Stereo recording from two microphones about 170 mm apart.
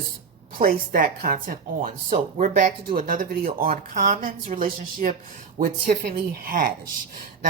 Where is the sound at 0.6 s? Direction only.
55° right (ahead or behind).